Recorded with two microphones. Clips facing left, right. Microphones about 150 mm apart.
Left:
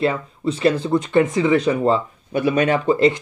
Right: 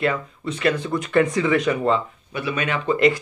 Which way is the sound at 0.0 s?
30° left (ahead or behind).